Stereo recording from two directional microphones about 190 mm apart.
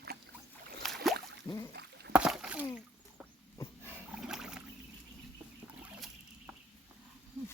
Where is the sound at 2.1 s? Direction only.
5° right (ahead or behind).